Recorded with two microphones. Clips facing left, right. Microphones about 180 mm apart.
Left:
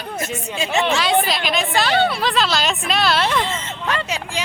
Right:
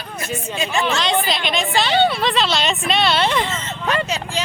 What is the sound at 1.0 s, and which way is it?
A woman's voice, centre (ahead or behind).